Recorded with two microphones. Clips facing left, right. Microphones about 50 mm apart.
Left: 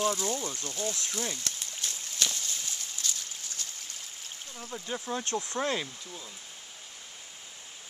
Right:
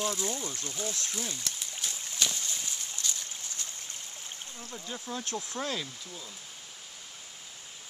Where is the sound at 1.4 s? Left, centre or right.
Centre.